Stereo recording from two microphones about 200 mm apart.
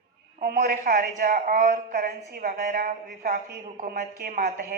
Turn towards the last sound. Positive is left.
turn(degrees=-45)  # may be behind; listen again after turning